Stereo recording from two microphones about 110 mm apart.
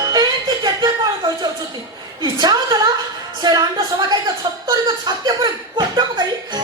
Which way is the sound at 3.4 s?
40° right (ahead or behind).